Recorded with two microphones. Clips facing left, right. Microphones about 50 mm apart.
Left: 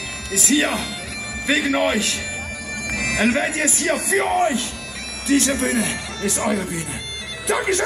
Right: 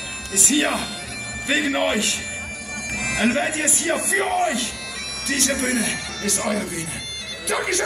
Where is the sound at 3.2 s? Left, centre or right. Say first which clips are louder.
Left 1 dB; right.